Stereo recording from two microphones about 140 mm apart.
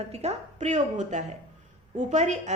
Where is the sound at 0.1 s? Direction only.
50° right (ahead or behind).